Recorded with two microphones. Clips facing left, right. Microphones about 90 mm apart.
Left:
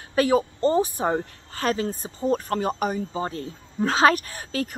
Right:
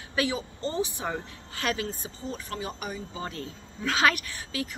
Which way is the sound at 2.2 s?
50° left (ahead or behind).